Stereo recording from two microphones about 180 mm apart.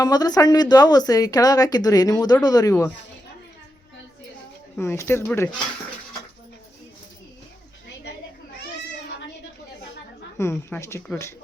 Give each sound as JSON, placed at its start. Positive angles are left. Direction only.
{"t": 0.0, "sound": "speech", "side_deg": 20}
{"t": 4.8, "sound": "speech", "side_deg": 15}
{"t": 10.3, "sound": "speech", "side_deg": 15}